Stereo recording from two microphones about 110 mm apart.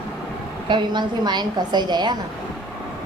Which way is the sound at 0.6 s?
45° right (ahead or behind).